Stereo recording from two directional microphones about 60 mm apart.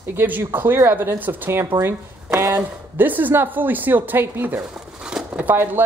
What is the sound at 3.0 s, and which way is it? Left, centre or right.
Speech, right.